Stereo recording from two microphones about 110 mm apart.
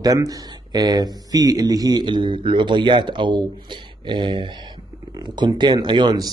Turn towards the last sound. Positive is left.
turn(degrees=-40)  # may be behind; listen again after turning